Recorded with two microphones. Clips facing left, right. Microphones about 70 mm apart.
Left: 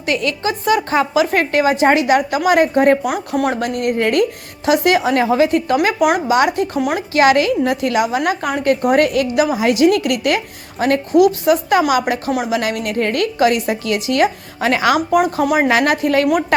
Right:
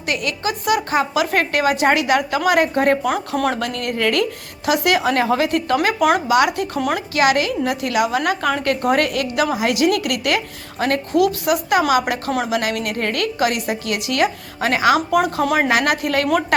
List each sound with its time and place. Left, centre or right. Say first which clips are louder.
0.0 s speech: left 4 dB; left
3.1 s speech: left 1 dB; centre
3.6 s speech: left 4 dB; left
6.7 s speech: left 2 dB; centre
7.1 s a woman's voice: left 5 dB; left
8.0 s a woman's voice: left 1 dB; left
15.1 s speech: left 3 dB; centre